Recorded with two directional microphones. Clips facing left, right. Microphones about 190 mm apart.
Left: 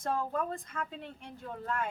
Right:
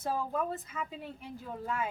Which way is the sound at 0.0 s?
5° right (ahead or behind).